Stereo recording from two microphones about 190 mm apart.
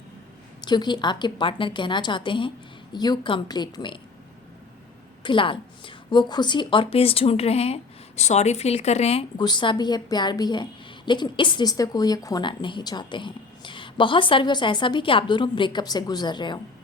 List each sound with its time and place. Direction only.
0.6 s a woman's voice: 20° left (ahead or behind)
5.2 s a woman's voice: 25° left (ahead or behind)